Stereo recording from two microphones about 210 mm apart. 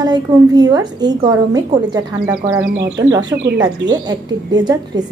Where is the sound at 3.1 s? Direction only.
20° right (ahead or behind).